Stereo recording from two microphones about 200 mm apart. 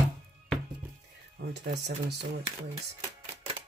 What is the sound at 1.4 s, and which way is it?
Speech, 55° right (ahead or behind).